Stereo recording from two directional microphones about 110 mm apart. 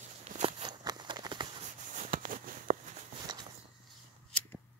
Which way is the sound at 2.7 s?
90° right.